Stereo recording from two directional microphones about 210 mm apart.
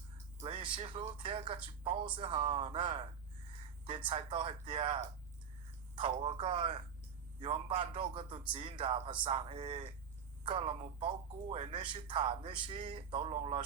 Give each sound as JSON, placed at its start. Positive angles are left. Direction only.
{"t": 0.4, "sound": "speech", "side_deg": -25}
{"t": 6.0, "sound": "a man's voice", "side_deg": -25}